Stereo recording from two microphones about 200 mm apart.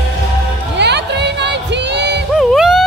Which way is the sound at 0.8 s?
60° right (ahead or behind).